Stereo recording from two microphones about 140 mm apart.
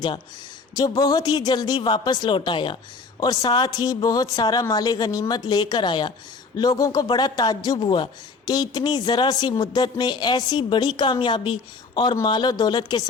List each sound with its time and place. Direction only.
0.9 s a man's voice: 25° left (ahead or behind)